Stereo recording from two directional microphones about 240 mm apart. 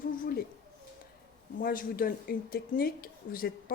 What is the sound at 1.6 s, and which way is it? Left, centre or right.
A woman's voice, left.